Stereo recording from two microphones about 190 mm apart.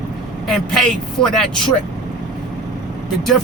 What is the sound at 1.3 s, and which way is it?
Speech, 5° left (ahead or behind).